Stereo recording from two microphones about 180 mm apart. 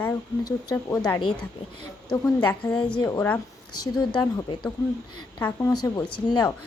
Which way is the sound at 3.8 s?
20° left (ahead or behind).